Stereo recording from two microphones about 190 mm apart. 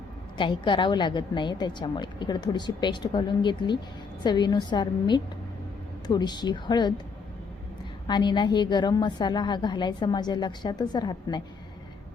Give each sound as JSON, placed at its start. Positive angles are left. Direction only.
{"t": 0.3, "sound": "a woman's voice", "side_deg": 25}
{"t": 8.0, "sound": "a woman's voice", "side_deg": 20}